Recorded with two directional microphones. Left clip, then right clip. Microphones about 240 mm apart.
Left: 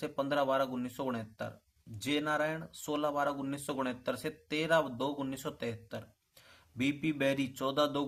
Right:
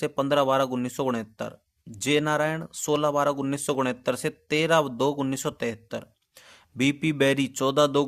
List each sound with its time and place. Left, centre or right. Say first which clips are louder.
0.0 s speech: right 9 dB; right